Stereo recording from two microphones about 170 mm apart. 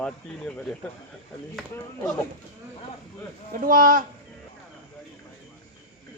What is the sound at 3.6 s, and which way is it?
Speech, 55° right (ahead or behind).